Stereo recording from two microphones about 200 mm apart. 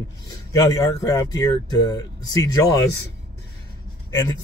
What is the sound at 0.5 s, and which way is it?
Speech, 15° left (ahead or behind).